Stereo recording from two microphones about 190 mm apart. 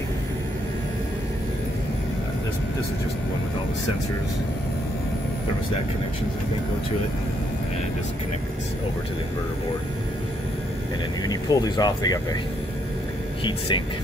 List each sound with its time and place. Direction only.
11.2 s speech: 20° left (ahead or behind)
13.4 s speech: 25° left (ahead or behind)